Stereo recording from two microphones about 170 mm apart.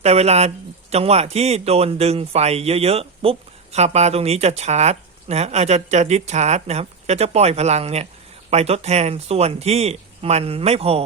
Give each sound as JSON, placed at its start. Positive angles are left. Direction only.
{"t": 0.0, "sound": "speech", "side_deg": -40}